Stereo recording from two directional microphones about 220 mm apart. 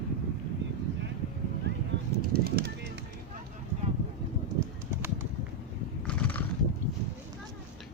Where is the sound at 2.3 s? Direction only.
45° right (ahead or behind).